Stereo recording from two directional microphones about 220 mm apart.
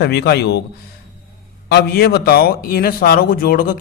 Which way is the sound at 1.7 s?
45° left (ahead or behind).